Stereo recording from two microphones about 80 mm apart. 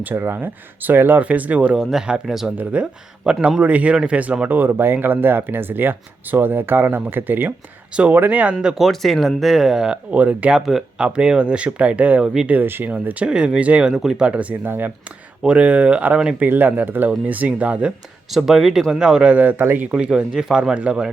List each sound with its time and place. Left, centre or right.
0.0 s speech: right
1.7 s speech: centre
2.6 s speech: centre
8.8 s speech: centre
10.7 s speech: centre
14.3 s speech: right
18.3 s speech: centre; by 19.8 s right
19.9 s speech: centre